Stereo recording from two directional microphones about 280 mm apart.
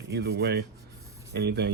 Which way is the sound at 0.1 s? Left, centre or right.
Right.